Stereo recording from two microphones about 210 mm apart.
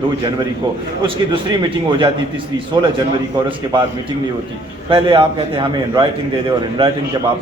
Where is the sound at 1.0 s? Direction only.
25° right (ahead or behind).